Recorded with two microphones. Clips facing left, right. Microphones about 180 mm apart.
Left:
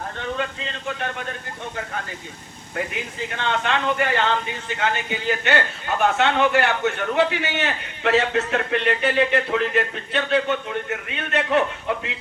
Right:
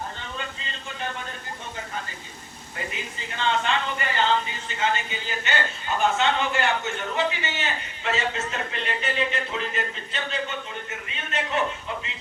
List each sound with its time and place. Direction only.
2.7 s a man's voice: 60° left (ahead or behind)